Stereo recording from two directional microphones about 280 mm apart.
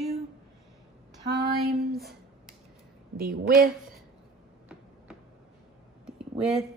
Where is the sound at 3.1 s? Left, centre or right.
Right.